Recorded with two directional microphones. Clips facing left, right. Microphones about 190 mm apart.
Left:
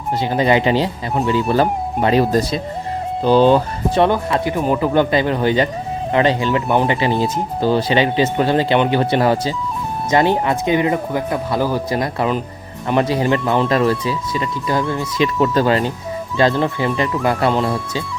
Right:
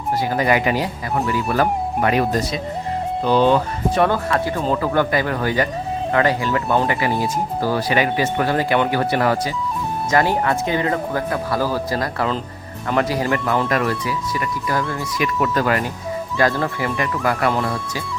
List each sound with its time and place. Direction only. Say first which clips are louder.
0.2 s speech: left 4 dB; 25° left (ahead or behind)